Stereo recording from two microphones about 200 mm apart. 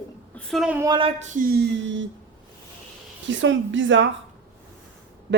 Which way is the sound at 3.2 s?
65° right (ahead or behind).